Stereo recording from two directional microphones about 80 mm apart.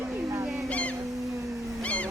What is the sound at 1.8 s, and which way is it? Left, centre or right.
Cat, centre.